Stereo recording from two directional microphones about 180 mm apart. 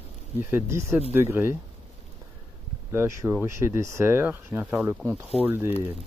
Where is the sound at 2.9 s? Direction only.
15° right (ahead or behind).